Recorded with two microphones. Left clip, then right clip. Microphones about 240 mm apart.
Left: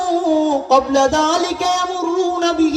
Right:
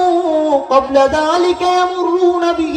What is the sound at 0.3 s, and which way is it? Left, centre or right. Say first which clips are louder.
Music: right 2 dB; left.